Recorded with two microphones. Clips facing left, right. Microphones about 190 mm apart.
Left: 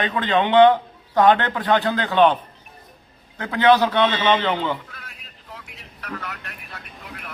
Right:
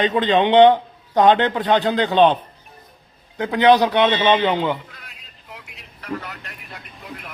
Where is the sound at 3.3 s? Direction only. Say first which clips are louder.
Right 2 dB; 15° right (ahead or behind).